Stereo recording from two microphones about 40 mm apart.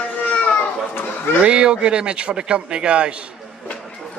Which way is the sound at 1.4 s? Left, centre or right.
Right.